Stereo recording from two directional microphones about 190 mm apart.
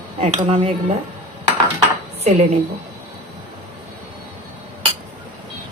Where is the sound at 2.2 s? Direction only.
35° right (ahead or behind).